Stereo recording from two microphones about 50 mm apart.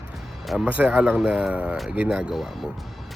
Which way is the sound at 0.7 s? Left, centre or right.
Right.